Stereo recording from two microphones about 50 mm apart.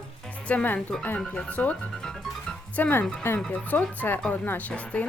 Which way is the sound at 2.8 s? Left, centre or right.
Left.